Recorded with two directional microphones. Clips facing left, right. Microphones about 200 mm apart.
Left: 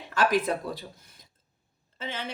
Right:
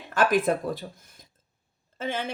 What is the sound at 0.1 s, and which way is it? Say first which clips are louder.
Speech: right 3 dB; 50° right (ahead or behind).